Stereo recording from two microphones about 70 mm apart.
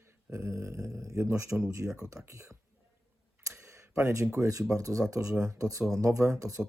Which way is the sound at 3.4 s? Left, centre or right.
Right.